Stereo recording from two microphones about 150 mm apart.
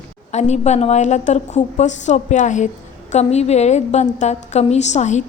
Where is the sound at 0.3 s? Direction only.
50° left (ahead or behind).